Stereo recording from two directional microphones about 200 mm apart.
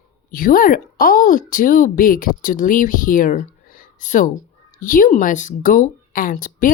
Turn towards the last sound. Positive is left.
turn(degrees=45)  # may be behind; listen again after turning